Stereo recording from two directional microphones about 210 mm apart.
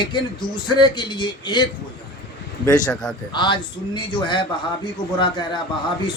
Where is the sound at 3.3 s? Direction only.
20° left (ahead or behind).